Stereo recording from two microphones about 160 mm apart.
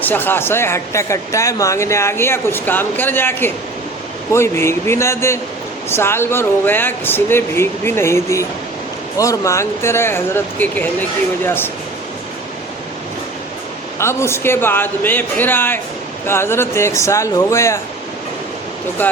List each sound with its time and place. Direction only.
0.0 s speech: 10° left (ahead or behind)
14.0 s speech: 15° left (ahead or behind)